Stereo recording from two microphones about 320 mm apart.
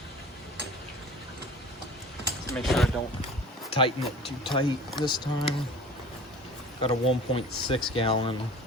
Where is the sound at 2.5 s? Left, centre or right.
Centre.